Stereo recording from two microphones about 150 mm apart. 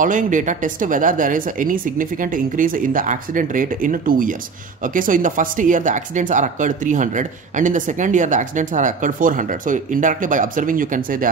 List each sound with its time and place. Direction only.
0.0 s speech: 60° right (ahead or behind)